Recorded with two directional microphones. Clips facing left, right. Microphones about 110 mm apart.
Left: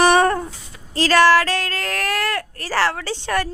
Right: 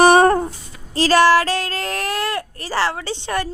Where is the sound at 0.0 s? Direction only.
35° right (ahead or behind).